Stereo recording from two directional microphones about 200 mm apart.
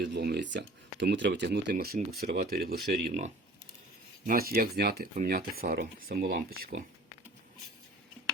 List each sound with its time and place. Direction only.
0.0 s speech: 55° right (ahead or behind)
1.7 s speech: 45° right (ahead or behind)